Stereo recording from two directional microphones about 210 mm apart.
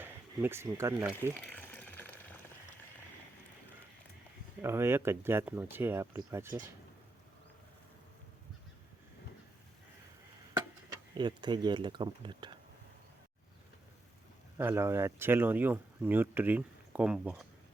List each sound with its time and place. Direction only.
0.0 s speech: 10° right (ahead or behind)
1.1 s a sound: 10° left (ahead or behind)
4.6 s speech: 10° right (ahead or behind)
11.1 s speech: 20° right (ahead or behind)
14.6 s speech: 10° right (ahead or behind)